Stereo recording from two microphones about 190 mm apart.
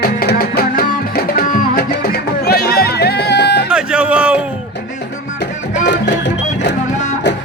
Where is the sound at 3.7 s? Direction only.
5° right (ahead or behind).